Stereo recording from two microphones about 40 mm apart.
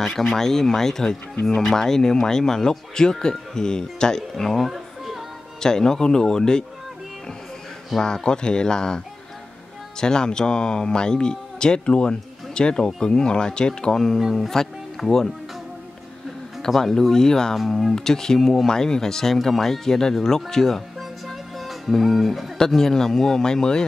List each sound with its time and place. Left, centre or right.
0.0 s speech: centre
4.6 s music: centre
5.6 s speech: centre
8.0 s speech: centre
16.6 s speech: centre
17.6 s speech: centre
17.9 s speech: centre
21.3 s music: centre
22.8 s speech: centre